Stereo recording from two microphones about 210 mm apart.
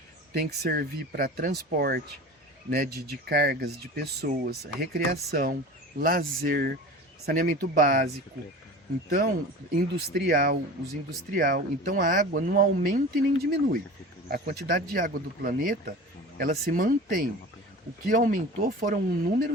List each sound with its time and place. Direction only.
0.3 s speech: 50° right (ahead or behind)
9.0 s speech: 45° right (ahead or behind)